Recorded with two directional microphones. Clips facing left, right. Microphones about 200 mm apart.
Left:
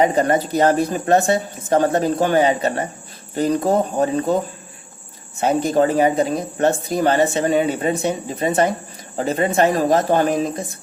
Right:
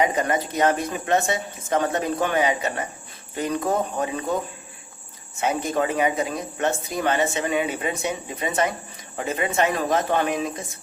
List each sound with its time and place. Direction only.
0.0 s speech: 35° left (ahead or behind)
5.4 s speech: 35° left (ahead or behind)